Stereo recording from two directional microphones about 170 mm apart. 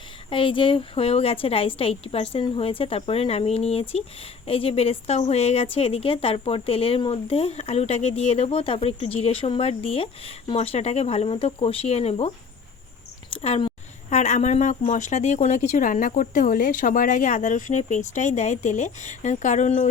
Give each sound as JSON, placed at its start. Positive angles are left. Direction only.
{"t": 0.3, "sound": "a woman's voice", "side_deg": 30}
{"t": 13.3, "sound": "speech", "side_deg": 35}
{"t": 14.1, "sound": "speech", "side_deg": 45}